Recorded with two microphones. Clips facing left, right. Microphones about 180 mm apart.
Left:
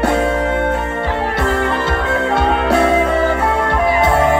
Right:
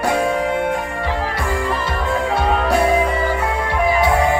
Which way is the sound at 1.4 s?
70° left (ahead or behind).